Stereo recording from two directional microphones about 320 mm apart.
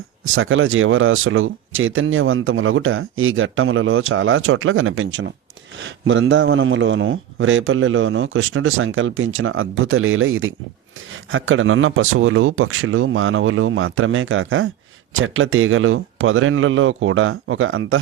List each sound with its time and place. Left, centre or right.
0.3 s speech: right